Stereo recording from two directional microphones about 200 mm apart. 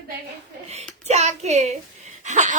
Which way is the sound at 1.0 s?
35° right (ahead or behind).